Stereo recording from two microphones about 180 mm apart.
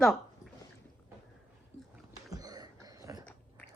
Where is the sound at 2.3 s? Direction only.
20° right (ahead or behind).